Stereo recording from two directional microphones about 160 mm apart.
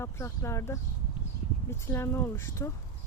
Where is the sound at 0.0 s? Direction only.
15° left (ahead or behind).